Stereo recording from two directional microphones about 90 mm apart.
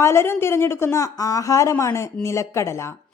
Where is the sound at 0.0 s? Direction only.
30° left (ahead or behind).